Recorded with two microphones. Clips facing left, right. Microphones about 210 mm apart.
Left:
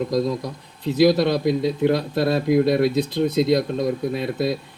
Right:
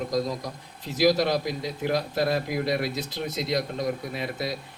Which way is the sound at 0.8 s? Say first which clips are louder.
Left 5 dB; 55° left (ahead or behind).